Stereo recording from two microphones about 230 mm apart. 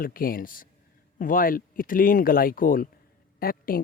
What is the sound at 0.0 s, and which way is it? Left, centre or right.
Speech, left.